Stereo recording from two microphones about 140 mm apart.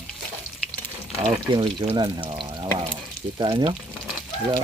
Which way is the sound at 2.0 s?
35° right (ahead or behind).